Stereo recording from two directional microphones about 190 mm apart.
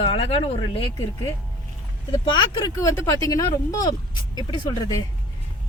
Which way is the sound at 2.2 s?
25° left (ahead or behind).